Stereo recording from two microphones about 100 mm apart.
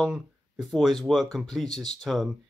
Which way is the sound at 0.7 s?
Centre (ahead or behind).